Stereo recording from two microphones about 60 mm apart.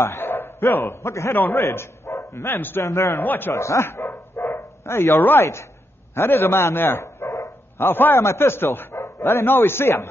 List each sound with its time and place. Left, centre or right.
0.0 s bow-wow: left
1.0 s a man's voice: left
1.3 s a man's voice: left
1.6 s speech: left
2.8 s a man's voice: left
3.2 s a man's voice: left
3.5 s speech: left
4.5 s bow-wow: left
4.9 s a man's voice: left
5.2 s a man's voice: left
7.7 s a man's voice: left